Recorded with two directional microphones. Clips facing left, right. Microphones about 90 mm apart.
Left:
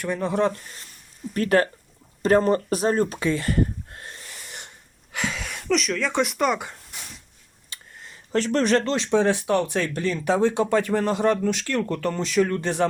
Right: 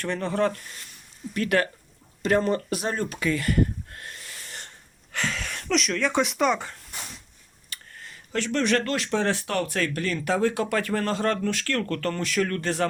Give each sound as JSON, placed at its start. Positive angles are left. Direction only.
{"t": 0.0, "sound": "speech", "side_deg": 10}
{"t": 1.3, "sound": "speech", "side_deg": 35}
{"t": 5.1, "sound": "speech", "side_deg": 10}
{"t": 8.3, "sound": "speech", "side_deg": 40}
{"t": 8.8, "sound": "speech", "side_deg": 25}